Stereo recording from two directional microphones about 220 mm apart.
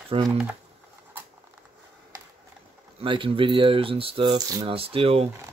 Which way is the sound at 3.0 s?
25° right (ahead or behind).